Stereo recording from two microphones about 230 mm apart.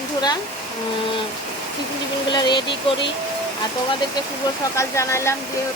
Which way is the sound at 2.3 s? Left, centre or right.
Centre.